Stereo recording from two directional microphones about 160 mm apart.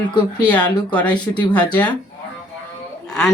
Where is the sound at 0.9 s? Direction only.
10° left (ahead or behind).